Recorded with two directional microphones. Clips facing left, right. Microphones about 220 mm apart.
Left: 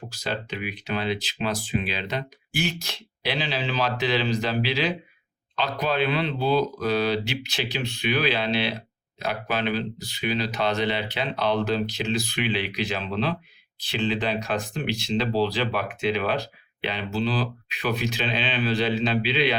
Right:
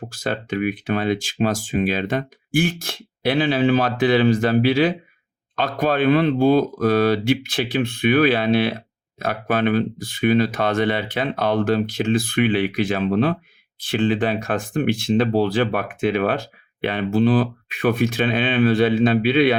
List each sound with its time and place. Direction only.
0.1 s speech: 50° right (ahead or behind)